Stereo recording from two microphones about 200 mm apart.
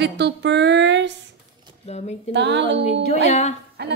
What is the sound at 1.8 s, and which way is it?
Speech, 35° left (ahead or behind).